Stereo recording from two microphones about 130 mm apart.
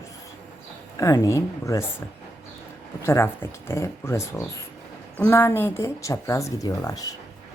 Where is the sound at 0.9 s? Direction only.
25° left (ahead or behind).